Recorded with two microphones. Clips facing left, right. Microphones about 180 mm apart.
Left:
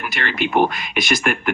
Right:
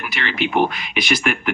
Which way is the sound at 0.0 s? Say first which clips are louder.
Even; 50° left (ahead or behind).